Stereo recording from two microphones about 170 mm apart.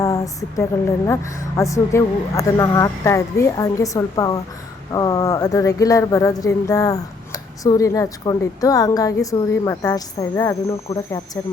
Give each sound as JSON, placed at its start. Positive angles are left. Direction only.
{"t": 0.0, "sound": "a woman's voice", "side_deg": 20}